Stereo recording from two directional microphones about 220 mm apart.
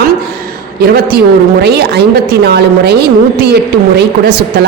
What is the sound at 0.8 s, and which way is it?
A woman's voice, 45° right (ahead or behind).